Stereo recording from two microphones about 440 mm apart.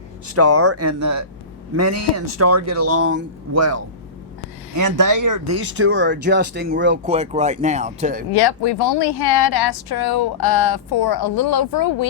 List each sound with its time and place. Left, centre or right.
0.3 s speech: right
5.5 s speech: right
8.3 s speech: left